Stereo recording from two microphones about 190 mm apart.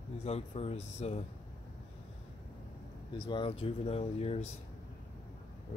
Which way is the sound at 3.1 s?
30° left (ahead or behind).